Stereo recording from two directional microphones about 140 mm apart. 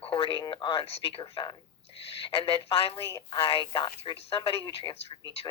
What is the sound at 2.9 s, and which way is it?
Speech, 20° left (ahead or behind).